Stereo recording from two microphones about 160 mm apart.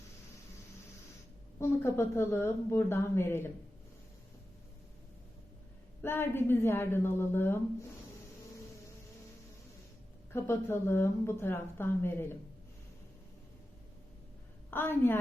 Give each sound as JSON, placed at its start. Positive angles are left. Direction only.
{"t": 1.5, "sound": "a woman's voice", "side_deg": 15}
{"t": 6.0, "sound": "a woman's voice", "side_deg": 15}
{"t": 10.3, "sound": "a woman's voice", "side_deg": 15}
{"t": 14.7, "sound": "a woman's voice", "side_deg": 15}